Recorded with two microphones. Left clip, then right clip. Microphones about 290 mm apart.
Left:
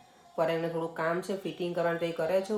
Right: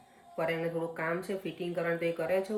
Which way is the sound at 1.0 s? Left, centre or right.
Centre.